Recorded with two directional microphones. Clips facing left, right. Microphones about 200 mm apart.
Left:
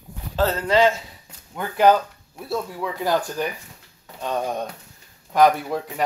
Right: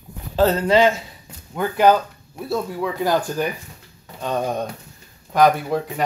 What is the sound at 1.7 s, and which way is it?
Speech, centre (ahead or behind).